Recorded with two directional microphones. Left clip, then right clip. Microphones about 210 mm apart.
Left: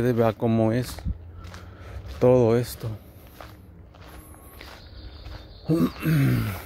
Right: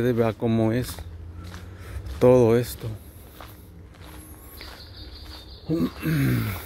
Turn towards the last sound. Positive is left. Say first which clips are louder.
# even
turn(degrees=10)  # may be behind; listen again after turning